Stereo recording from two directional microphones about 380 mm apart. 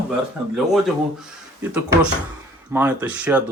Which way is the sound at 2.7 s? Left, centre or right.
Centre.